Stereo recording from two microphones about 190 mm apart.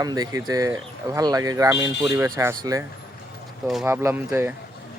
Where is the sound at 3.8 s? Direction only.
10° right (ahead or behind).